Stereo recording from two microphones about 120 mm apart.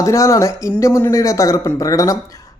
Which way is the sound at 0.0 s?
25° left (ahead or behind).